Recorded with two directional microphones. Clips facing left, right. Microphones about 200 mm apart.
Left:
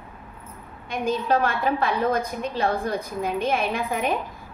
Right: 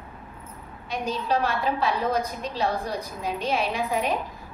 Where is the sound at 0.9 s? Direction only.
55° left (ahead or behind).